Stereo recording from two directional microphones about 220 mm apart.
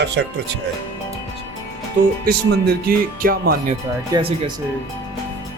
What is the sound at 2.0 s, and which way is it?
Speech, 35° right (ahead or behind).